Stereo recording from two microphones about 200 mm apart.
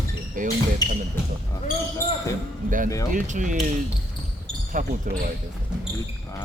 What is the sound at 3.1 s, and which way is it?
Speech, 40° right (ahead or behind).